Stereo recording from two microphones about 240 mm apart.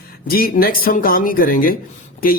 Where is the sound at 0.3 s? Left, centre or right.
Left.